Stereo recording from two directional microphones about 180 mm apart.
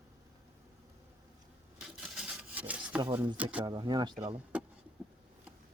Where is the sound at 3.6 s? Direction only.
25° right (ahead or behind).